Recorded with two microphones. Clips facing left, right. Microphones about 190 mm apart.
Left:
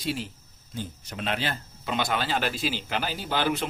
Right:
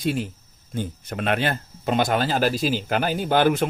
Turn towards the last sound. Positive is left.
turn(degrees=-50)  # may be behind; listen again after turning